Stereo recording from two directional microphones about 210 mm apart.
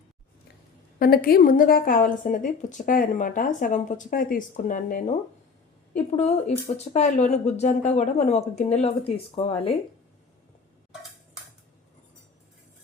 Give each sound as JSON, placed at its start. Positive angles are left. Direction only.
{"t": 0.9, "sound": "a woman's voice", "side_deg": 45}